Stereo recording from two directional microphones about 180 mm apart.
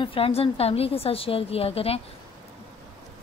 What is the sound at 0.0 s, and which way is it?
A woman's voice, 30° left (ahead or behind).